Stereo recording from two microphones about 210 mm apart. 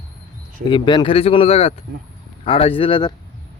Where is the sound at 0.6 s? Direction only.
20° left (ahead or behind).